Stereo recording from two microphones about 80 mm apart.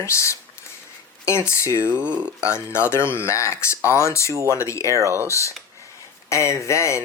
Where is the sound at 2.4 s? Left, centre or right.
Left.